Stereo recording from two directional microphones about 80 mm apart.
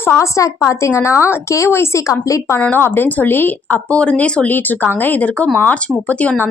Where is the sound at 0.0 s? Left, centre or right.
Left.